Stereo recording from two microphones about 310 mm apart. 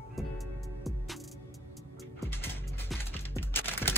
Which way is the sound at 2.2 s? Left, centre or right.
Centre.